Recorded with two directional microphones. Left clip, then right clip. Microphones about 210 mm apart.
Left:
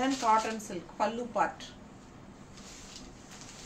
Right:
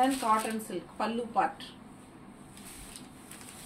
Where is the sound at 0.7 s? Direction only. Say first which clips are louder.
Left 2 dB; 20° left (ahead or behind).